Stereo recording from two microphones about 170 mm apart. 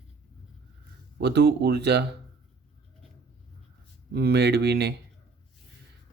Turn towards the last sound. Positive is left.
turn(degrees=-75)  # may be behind; listen again after turning